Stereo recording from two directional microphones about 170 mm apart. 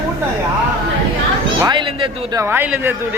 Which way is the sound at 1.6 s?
30° right (ahead or behind).